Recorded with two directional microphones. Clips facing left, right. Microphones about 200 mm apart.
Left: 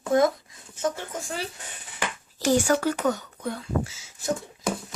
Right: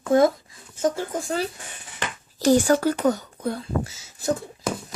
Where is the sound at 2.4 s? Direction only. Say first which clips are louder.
Right 4 dB; 35° right (ahead or behind).